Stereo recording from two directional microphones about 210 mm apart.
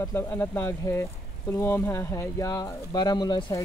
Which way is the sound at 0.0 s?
10° left (ahead or behind).